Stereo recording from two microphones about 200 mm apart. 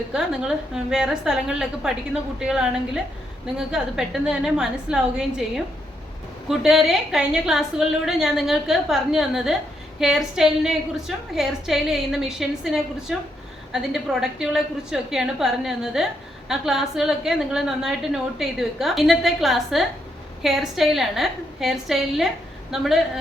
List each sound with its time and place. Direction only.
0.1 s a woman's voice: 5° right (ahead or behind)
6.5 s a woman's voice: centre (ahead or behind)